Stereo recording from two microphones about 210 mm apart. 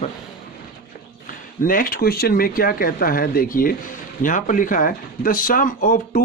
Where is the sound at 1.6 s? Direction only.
40° left (ahead or behind).